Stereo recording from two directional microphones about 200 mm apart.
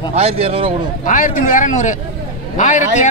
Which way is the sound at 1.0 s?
40° left (ahead or behind).